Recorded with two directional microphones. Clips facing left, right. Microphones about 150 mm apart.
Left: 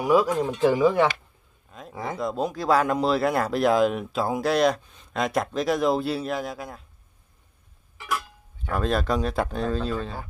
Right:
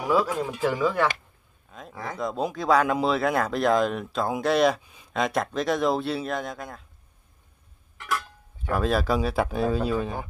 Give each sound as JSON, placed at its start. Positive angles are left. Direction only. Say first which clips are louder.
{"t": 0.0, "sound": "speech", "louder": "left 3 dB", "side_deg": 15}
{"t": 1.7, "sound": "speech", "louder": "left 3 dB", "side_deg": 0}
{"t": 8.0, "sound": "speech", "louder": "even", "side_deg": 5}